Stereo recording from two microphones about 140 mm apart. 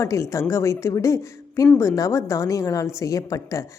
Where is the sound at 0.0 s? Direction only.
20° left (ahead or behind).